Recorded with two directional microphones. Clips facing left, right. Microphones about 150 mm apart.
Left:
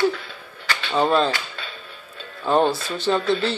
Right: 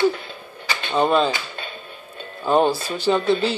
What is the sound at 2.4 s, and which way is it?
Music, 5° right (ahead or behind).